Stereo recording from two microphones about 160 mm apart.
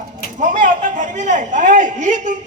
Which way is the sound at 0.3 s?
50° right (ahead or behind).